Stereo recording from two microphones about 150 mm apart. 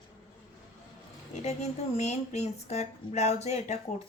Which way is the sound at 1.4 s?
45° left (ahead or behind).